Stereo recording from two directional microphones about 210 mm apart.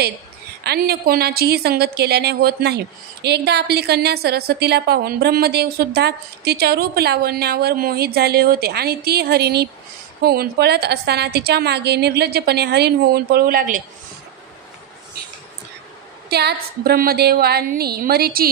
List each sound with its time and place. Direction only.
0.7 s a woman's voice: 45° right (ahead or behind)
16.3 s a woman's voice: 50° right (ahead or behind)